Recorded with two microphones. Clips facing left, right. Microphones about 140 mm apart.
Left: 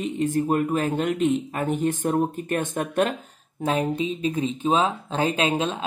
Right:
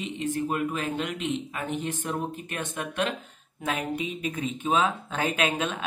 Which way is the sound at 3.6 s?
30° left (ahead or behind).